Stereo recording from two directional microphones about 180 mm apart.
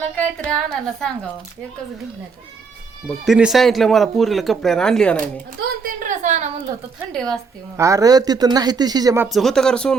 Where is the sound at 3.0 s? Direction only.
Centre (ahead or behind).